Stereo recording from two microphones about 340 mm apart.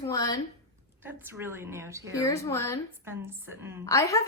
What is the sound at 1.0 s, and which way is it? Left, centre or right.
A woman's voice, centre.